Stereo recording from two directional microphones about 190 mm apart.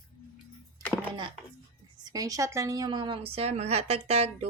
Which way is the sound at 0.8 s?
10° left (ahead or behind).